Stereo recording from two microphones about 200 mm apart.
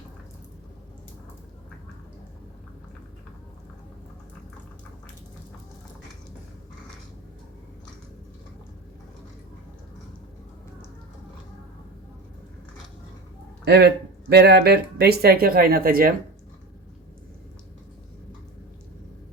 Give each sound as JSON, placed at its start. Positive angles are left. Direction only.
{"t": 13.7, "sound": "speech", "side_deg": -55}